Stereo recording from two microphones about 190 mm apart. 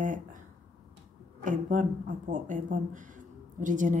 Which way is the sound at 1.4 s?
40° right (ahead or behind).